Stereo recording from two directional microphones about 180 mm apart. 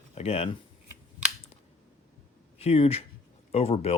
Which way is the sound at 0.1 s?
35° left (ahead or behind).